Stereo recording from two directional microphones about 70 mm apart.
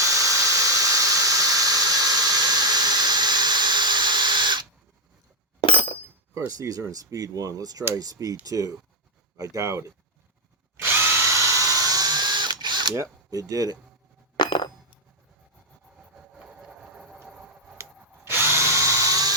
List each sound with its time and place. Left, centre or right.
0.0 s a sound: right
6.5 s speech: right
10.8 s drill: right
13.0 s speech: right
14.3 s coin: left
16.4 s train: centre
17.2 s tick-tock: centre
18.3 s drill: right